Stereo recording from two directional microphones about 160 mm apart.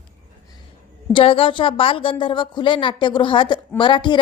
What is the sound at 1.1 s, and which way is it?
A woman's voice, 35° left (ahead or behind).